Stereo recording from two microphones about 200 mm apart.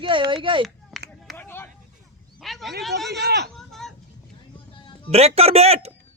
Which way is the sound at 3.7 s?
Centre (ahead or behind).